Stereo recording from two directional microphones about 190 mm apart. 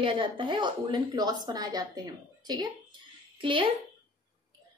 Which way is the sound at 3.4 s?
25° right (ahead or behind).